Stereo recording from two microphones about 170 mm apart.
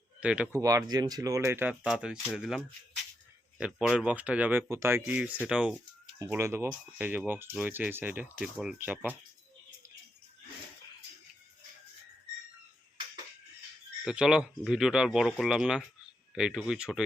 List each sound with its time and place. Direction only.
0.2 s speech: 5° right (ahead or behind)
0.5 s speech: 20° right (ahead or behind)
6.1 s speech: 20° right (ahead or behind)
14.0 s speech: 5° right (ahead or behind)